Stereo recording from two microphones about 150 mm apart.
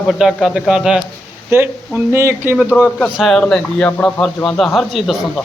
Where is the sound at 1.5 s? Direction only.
15° right (ahead or behind).